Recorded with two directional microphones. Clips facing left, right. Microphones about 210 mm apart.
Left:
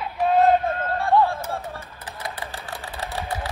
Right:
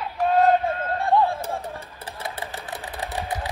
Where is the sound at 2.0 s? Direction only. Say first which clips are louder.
Right 1 dB; 25° right (ahead or behind).